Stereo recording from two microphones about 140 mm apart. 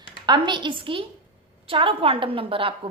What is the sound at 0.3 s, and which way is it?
A woman's voice, 35° right (ahead or behind).